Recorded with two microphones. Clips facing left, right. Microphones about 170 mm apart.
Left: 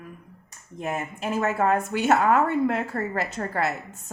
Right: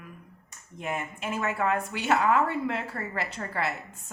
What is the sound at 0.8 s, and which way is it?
A woman's voice, 40° left (ahead or behind).